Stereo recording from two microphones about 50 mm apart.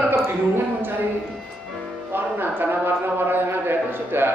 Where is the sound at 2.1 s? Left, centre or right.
Right.